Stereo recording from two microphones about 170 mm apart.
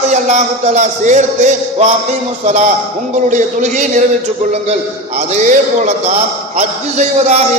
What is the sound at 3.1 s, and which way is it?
A man's voice, 45° right (ahead or behind).